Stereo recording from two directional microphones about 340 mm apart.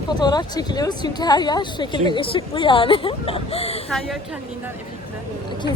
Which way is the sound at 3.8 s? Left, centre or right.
Centre.